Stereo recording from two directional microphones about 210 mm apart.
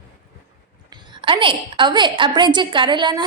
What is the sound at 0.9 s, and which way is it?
A woman's voice, 25° right (ahead or behind).